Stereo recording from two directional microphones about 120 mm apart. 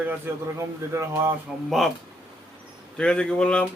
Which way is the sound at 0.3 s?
20° right (ahead or behind).